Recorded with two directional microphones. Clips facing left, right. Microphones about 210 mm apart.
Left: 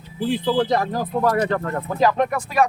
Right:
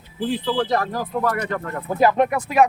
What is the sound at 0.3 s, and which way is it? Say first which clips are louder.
Speech: left 3 dB; 15° left (ahead or behind).